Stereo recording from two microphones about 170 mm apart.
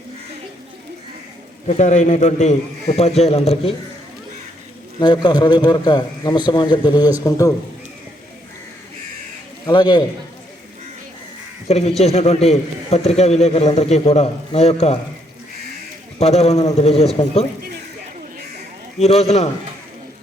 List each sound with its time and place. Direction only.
1.6 s a man's voice: 45° left (ahead or behind)
4.9 s a man's voice: 25° left (ahead or behind)
9.6 s a man's voice: 25° left (ahead or behind)
11.7 s a man's voice: 40° left (ahead or behind)
16.2 s a man's voice: 40° left (ahead or behind)
18.9 s a man's voice: 40° left (ahead or behind)